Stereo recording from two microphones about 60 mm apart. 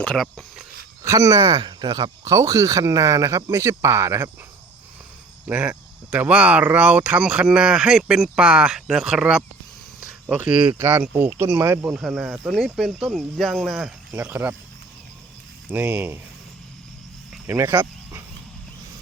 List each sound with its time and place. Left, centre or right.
0.0 s speech: centre
1.0 s speech: right
2.2 s speech: right
5.5 s speech: right; by 9.2 s centre
10.2 s speech: right
10.8 s speech: right
11.1 s speech: right
11.6 s speech: right
11.9 s speech: centre
14.1 s speech: right
15.8 s speech: right
17.4 s cricket: right